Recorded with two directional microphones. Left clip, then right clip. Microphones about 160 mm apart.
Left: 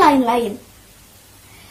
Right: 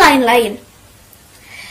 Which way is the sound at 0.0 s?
25° right (ahead or behind).